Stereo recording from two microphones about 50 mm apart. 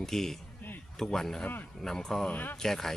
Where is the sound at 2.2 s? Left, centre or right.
Left.